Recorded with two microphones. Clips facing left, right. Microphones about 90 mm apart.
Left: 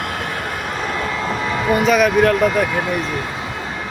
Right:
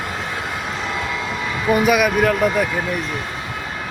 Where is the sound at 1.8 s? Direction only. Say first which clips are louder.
Left 4 dB; 5° right (ahead or behind).